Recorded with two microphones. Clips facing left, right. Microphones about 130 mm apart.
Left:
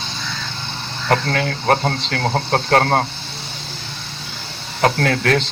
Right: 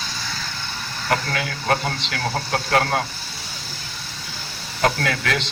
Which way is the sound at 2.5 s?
50° left (ahead or behind).